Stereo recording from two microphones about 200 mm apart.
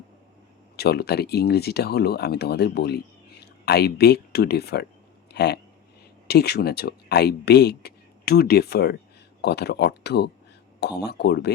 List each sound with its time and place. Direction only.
0.8 s speech: 55° left (ahead or behind)